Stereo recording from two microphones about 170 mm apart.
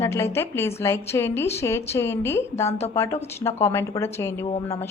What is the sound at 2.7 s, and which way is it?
Speech, 35° left (ahead or behind).